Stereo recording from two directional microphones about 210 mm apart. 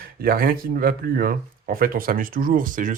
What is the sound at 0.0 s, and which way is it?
Speech, 45° right (ahead or behind).